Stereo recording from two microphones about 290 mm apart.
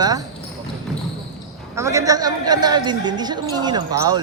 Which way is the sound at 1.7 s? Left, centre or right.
Centre.